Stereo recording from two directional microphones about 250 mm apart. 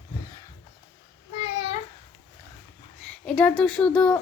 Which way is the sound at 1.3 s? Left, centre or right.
Left.